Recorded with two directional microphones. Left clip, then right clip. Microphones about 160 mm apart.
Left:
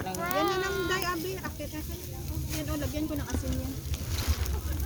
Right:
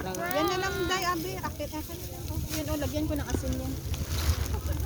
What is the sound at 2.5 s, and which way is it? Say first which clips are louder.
Speech: right 3 dB; 55° right (ahead or behind).